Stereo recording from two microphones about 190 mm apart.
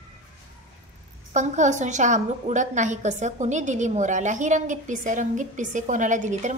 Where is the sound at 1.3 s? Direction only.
40° right (ahead or behind).